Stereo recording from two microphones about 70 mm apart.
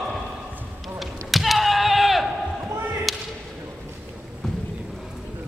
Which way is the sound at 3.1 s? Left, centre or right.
Centre.